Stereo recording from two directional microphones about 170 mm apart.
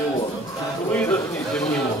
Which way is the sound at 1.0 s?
10° left (ahead or behind).